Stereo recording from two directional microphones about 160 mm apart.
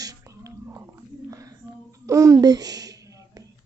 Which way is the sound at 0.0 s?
20° right (ahead or behind).